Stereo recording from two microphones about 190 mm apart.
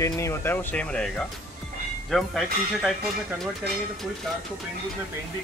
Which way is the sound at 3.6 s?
60° right (ahead or behind).